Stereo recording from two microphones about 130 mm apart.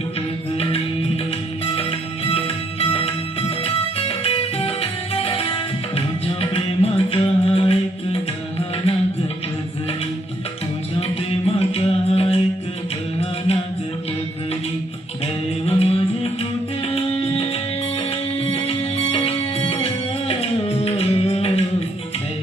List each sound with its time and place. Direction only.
1.6 s music: 45° left (ahead or behind)
11.4 s music: 50° left (ahead or behind)
15.6 s music: 50° left (ahead or behind)